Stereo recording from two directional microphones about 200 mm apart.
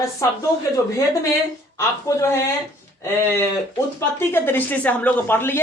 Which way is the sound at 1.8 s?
15° left (ahead or behind).